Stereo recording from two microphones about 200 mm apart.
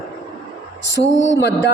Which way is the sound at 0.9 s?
70° left (ahead or behind).